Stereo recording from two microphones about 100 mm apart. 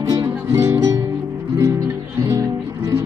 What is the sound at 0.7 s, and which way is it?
Music, 35° right (ahead or behind).